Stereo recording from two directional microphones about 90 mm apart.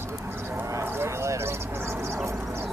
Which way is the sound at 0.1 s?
25° right (ahead or behind).